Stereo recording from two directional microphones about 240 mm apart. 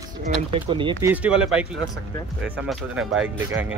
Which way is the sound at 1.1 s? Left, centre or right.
Centre.